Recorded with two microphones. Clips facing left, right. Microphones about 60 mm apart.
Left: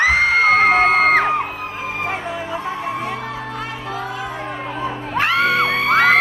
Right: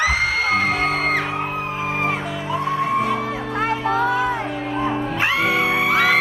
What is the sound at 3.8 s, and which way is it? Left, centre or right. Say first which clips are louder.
Music: right 8 dB; right.